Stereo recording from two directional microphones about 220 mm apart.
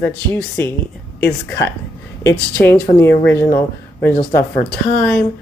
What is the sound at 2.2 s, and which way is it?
Speech, 10° left (ahead or behind).